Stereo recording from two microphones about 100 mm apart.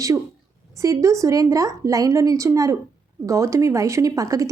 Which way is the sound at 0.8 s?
30° right (ahead or behind).